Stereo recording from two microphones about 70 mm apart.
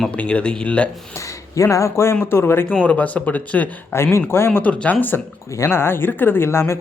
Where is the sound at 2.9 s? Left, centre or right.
Centre.